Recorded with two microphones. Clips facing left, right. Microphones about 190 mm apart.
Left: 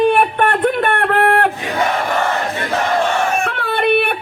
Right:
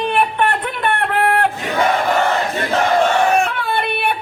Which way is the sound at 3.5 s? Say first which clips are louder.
Left 4 dB; 60° left (ahead or behind).